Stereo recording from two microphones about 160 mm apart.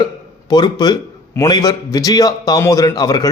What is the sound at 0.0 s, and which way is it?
A man's voice, 25° left (ahead or behind).